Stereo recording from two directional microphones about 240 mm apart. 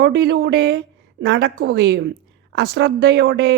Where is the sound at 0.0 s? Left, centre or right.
Right.